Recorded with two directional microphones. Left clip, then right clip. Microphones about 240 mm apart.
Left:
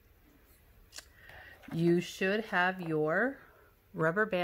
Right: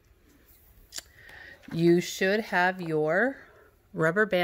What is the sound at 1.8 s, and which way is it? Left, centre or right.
Speech, right.